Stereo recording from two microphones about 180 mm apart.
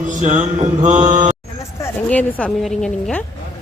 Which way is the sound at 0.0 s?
45° right (ahead or behind).